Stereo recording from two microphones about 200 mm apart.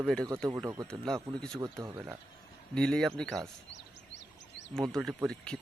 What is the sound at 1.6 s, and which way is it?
Speech, 15° right (ahead or behind).